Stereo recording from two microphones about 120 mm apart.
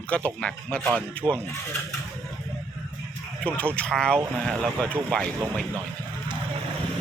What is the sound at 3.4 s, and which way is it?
Speech, 10° left (ahead or behind).